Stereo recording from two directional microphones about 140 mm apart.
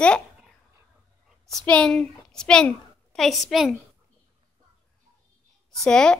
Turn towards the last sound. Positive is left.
turn(degrees=5)  # may be behind; listen again after turning